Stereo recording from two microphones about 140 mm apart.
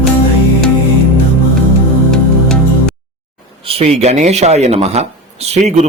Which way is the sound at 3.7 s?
45° right (ahead or behind).